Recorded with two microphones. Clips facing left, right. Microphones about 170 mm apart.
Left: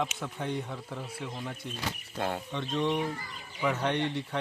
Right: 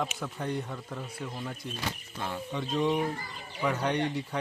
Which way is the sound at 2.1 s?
55° left (ahead or behind).